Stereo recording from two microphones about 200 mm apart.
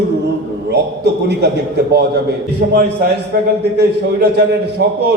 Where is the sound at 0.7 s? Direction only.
55° right (ahead or behind).